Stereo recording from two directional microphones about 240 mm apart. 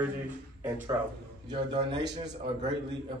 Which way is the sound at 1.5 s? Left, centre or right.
Right.